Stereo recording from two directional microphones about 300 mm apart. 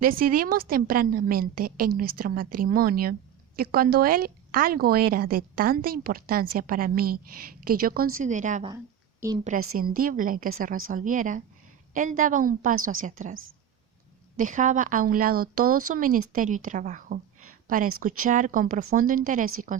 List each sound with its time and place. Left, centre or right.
0.3 s a woman's voice: right
14.3 s a woman's voice: right